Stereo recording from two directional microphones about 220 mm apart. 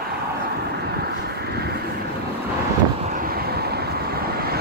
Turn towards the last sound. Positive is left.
turn(degrees=-45)  # may be behind; listen again after turning